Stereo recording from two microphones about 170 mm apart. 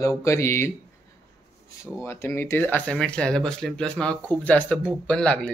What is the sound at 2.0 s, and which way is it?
Speech, 15° left (ahead or behind).